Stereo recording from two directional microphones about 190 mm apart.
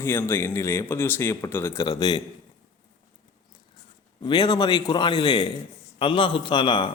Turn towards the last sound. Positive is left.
turn(degrees=25)  # may be behind; listen again after turning